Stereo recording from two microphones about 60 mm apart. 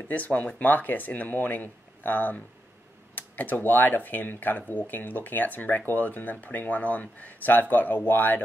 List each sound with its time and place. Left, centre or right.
0.1 s speech: left